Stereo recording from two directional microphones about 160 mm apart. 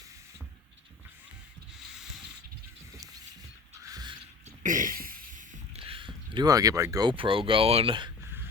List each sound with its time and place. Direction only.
1.9 s sanding: 5° right (ahead or behind)
3.8 s mechanisms: 25° right (ahead or behind)
4.6 s a sound: 55° right (ahead or behind)
5.8 s speech: 30° right (ahead or behind)